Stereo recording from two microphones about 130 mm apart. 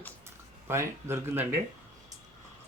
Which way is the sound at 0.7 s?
20° right (ahead or behind).